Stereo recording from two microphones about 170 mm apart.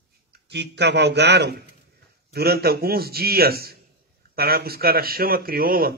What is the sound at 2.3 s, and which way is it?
A man's voice, 65° right (ahead or behind).